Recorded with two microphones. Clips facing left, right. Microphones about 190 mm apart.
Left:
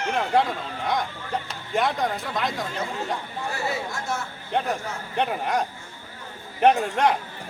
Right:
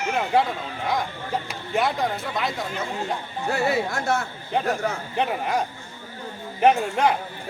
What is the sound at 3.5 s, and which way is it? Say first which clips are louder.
Speech: right 7 dB; 60° right (ahead or behind).